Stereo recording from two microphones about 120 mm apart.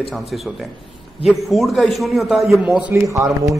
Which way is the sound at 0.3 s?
Centre (ahead or behind).